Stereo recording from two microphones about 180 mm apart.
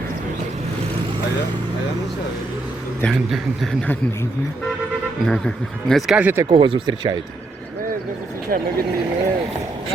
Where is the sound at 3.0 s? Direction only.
Centre (ahead or behind).